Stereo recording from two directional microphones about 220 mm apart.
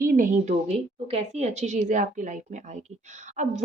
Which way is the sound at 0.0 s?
40° right (ahead or behind).